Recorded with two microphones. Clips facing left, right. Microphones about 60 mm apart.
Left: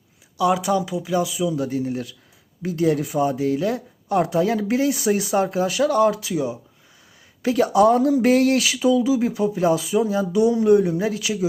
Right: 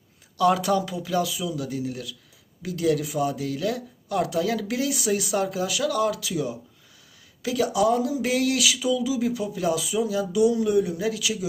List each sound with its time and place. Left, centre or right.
0.3 s speech: centre
1.5 s speech: left
7.4 s speech: left